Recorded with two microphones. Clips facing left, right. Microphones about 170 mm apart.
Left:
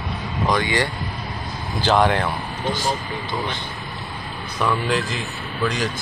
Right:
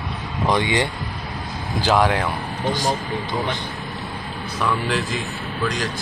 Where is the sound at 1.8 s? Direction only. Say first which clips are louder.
Even; 5° right (ahead or behind).